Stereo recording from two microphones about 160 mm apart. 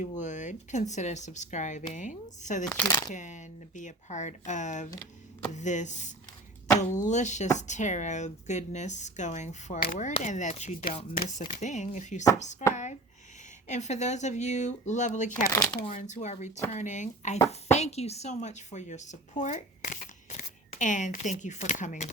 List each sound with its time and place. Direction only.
0.0 s speech: 50° left (ahead or behind)
15.4 s speech: 20° left (ahead or behind)
15.9 s speech: 50° left (ahead or behind)